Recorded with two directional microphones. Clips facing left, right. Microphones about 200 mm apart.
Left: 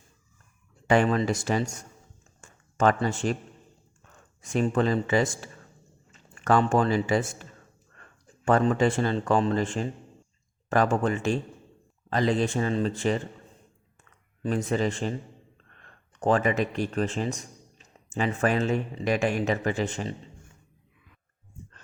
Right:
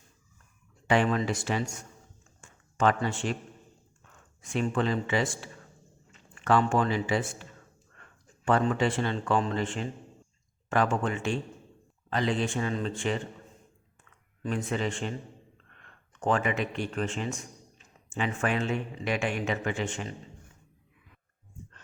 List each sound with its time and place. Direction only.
0.9 s speech: 40° left (ahead or behind)
2.4 s a sound: 40° left (ahead or behind)
4.4 s a man's voice: 40° left (ahead or behind)
8.4 s speech: 40° left (ahead or behind)
14.4 s speech: 40° left (ahead or behind)